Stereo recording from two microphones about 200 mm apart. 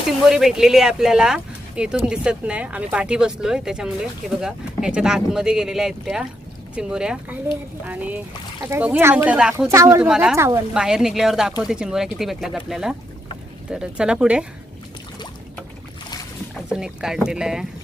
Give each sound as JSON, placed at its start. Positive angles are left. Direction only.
{"t": 0.3, "sound": "speech", "side_deg": 0}
{"t": 10.1, "sound": "speech", "side_deg": -5}
{"t": 16.6, "sound": "speech", "side_deg": -5}